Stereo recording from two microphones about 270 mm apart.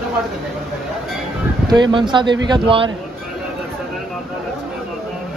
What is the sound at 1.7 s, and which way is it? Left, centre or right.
Speech, centre.